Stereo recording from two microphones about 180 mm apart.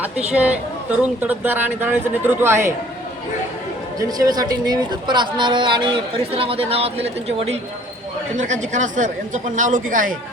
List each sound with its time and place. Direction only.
0.0 s speech: 5° right (ahead or behind)
3.9 s speech: 20° right (ahead or behind); by 10.2 s 50° right (ahead or behind)